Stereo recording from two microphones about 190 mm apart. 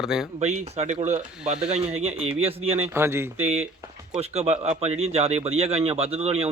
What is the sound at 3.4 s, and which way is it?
A man's voice, 35° right (ahead or behind).